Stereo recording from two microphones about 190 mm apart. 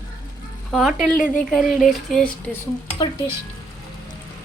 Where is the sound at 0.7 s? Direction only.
Centre (ahead or behind).